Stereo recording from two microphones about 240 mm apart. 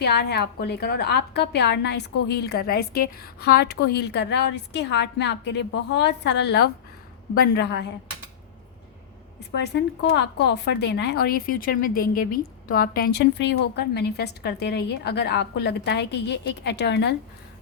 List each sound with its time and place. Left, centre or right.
0.0 s a woman's voice: left
10.2 s a woman's voice: left